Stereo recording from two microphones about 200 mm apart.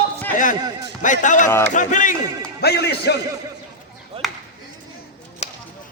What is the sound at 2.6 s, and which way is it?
Speech, 55° left (ahead or behind).